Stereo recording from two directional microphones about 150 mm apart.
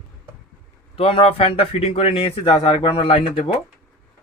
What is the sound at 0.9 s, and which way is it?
A man's voice, 40° left (ahead or behind).